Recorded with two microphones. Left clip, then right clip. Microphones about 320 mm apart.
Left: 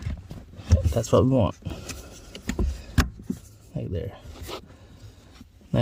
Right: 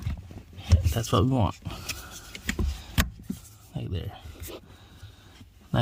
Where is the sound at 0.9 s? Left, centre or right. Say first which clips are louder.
Left 6 dB; centre.